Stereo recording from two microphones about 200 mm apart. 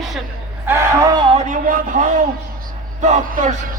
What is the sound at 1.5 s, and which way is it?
Music, 40° right (ahead or behind).